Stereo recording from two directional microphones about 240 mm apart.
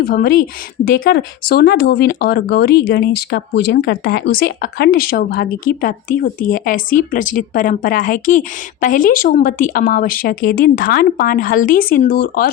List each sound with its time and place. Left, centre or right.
0.0 s speech: left